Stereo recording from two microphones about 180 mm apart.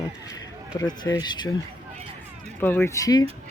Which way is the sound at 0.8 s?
20° left (ahead or behind).